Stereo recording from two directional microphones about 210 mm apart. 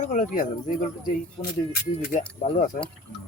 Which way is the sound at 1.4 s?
25° left (ahead or behind).